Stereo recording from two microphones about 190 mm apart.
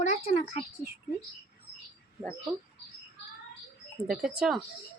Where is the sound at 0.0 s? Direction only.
35° left (ahead or behind).